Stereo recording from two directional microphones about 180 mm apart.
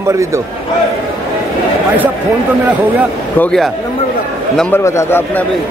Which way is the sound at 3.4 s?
5° left (ahead or behind).